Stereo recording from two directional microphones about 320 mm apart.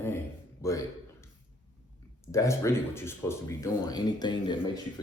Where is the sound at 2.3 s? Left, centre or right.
Centre.